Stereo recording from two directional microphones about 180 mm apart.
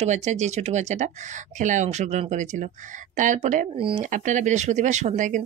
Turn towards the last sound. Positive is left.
turn(degrees=-45)  # may be behind; listen again after turning